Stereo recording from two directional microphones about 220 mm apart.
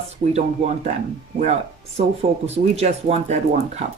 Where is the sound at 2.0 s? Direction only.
30° right (ahead or behind).